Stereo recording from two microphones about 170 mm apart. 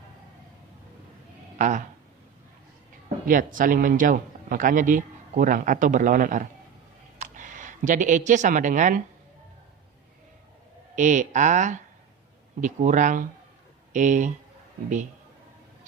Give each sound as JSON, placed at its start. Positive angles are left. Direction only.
{"t": 1.5, "sound": "speech", "side_deg": -50}
{"t": 3.2, "sound": "a man's voice", "side_deg": -55}
{"t": 10.9, "sound": "a man's voice", "side_deg": -45}